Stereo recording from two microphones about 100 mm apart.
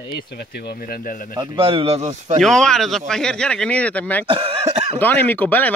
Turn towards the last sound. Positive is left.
turn(degrees=15)  # may be behind; listen again after turning